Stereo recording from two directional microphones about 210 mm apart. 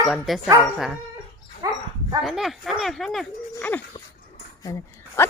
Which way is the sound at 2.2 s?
Centre (ahead or behind).